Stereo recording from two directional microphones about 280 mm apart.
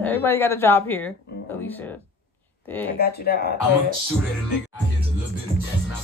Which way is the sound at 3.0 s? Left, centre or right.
Left.